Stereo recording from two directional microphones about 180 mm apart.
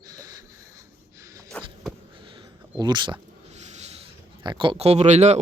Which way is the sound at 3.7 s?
35° right (ahead or behind).